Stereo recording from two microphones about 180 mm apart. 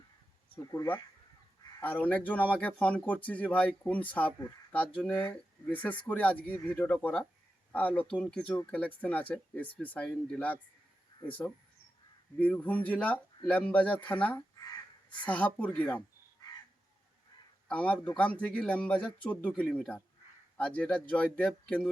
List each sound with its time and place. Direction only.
0.6 s speech: 20° left (ahead or behind)
1.8 s speech: 10° left (ahead or behind)
17.7 s a man's voice: 5° left (ahead or behind)